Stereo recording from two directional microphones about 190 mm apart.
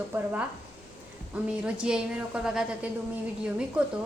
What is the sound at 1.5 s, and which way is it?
A woman's voice, 5° right (ahead or behind).